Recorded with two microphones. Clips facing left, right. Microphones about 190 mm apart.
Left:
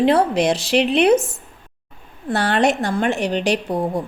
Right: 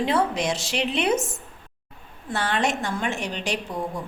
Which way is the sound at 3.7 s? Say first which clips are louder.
Left 8 dB; 35° left (ahead or behind).